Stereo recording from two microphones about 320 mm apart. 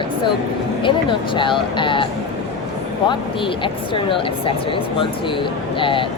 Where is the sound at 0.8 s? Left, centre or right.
Centre.